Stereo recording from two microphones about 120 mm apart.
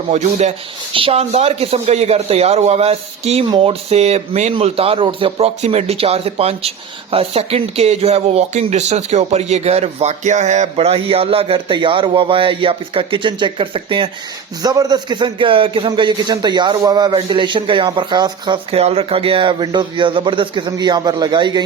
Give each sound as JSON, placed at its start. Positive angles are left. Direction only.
{"t": 0.1, "sound": "speech", "side_deg": -75}
{"t": 0.9, "sound": "speech", "side_deg": -55}
{"t": 4.5, "sound": "speech", "side_deg": -55}
{"t": 14.6, "sound": "speech", "side_deg": -35}
{"t": 15.9, "sound": "speech", "side_deg": -40}
{"t": 18.7, "sound": "speech", "side_deg": -55}